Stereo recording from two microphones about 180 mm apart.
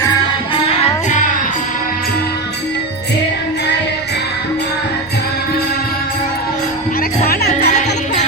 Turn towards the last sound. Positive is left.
turn(degrees=60)  # may be behind; listen again after turning